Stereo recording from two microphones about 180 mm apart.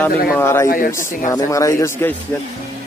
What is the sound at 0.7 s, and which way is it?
Speech, 50° left (ahead or behind).